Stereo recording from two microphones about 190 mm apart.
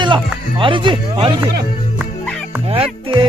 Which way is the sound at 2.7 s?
30° right (ahead or behind).